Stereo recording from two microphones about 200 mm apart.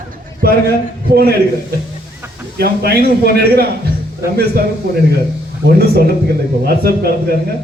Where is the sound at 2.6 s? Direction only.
50° right (ahead or behind).